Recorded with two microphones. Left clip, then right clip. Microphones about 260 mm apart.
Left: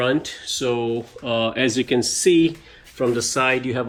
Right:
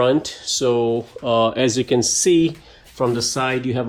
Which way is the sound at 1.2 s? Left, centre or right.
Centre.